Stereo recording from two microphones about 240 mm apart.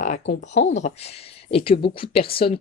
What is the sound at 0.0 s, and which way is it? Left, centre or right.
A woman's voice, left.